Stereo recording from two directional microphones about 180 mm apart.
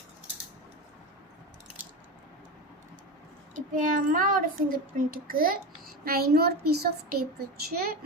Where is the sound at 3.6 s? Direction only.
50° right (ahead or behind).